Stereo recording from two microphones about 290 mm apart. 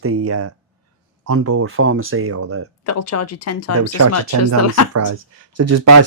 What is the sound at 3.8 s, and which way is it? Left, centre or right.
Speech, right.